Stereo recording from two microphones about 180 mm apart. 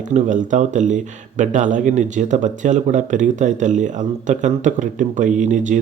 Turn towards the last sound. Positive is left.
turn(degrees=-45)  # may be behind; listen again after turning